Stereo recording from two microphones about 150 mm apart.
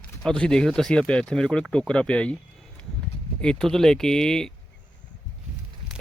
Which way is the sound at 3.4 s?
5° left (ahead or behind).